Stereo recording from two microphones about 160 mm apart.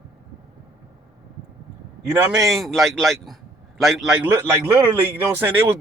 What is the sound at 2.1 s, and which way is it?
A man's voice, 5° right (ahead or behind).